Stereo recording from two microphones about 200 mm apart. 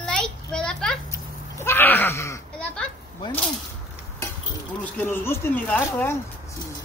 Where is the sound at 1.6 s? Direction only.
10° left (ahead or behind).